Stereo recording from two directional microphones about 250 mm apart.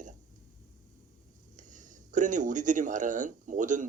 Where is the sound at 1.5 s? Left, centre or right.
Right.